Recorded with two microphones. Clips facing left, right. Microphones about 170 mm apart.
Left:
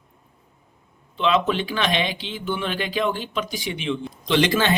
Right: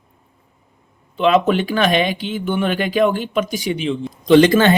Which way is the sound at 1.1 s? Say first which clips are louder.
Right 6 dB; 50° right (ahead or behind).